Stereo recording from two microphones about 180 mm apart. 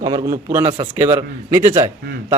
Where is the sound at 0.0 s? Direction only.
25° right (ahead or behind).